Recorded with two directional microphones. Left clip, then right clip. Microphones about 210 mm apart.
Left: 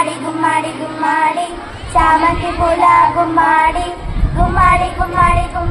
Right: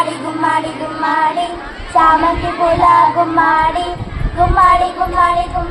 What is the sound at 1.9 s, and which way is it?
Speech, 20° left (ahead or behind).